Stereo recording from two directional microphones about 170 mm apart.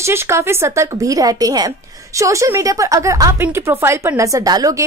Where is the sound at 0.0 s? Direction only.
15° right (ahead or behind).